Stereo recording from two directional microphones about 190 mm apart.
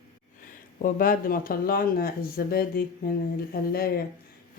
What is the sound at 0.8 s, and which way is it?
Speech, 50° left (ahead or behind).